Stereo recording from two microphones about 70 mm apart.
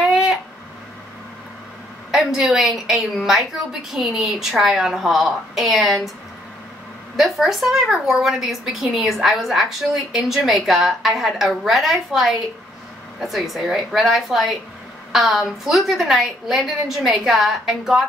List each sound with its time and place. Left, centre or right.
0.1 s a sound: centre
2.0 s a woman's voice: centre
7.2 s a woman's voice: centre